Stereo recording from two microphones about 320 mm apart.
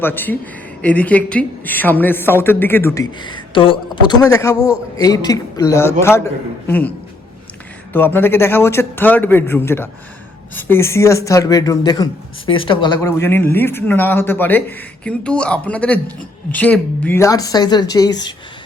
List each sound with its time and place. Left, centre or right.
0.0 s a woman's voice: centre
7.9 s a woman's voice: centre